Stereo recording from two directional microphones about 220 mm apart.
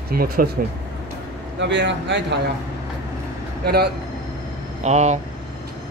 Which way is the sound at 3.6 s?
45° right (ahead or behind).